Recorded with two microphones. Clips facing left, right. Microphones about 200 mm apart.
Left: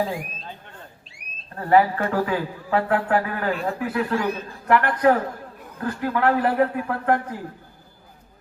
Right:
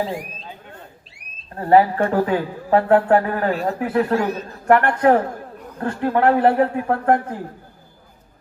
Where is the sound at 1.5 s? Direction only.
30° right (ahead or behind).